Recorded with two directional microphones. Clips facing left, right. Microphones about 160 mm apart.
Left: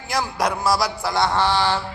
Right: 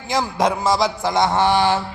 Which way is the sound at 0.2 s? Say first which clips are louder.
Right 3 dB; 20° right (ahead or behind).